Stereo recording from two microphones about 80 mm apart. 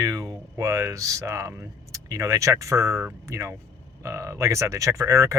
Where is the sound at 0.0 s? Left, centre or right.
Right.